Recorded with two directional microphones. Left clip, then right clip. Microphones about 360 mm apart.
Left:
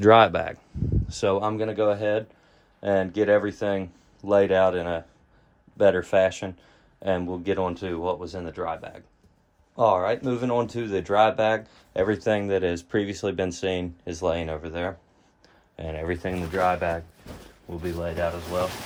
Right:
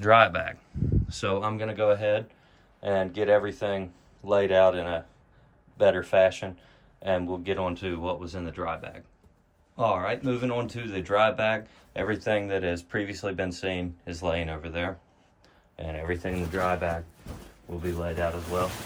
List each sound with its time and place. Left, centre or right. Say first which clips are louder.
0.0 s speech: left 3 dB; centre
15.7 s speech: left 2 dB; left